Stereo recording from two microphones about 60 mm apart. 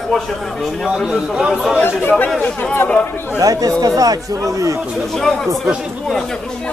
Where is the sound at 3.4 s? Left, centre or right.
Right.